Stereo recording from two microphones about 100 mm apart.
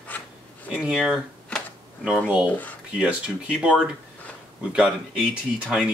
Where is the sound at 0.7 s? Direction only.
5° right (ahead or behind).